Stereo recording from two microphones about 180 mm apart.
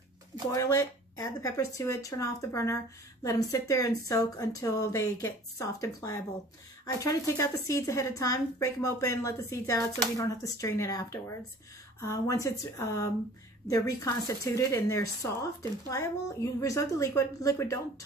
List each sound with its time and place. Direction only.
0.5 s speech: 20° left (ahead or behind)